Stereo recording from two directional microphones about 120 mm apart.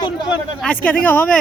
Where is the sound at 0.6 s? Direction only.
10° left (ahead or behind).